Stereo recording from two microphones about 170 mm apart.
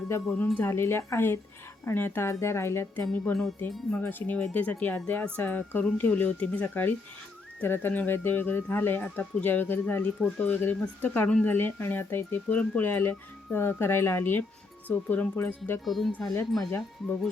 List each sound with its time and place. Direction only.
0.4 s speech: 10° left (ahead or behind)
3.1 s speech: centre (ahead or behind)
15.8 s speech: centre (ahead or behind)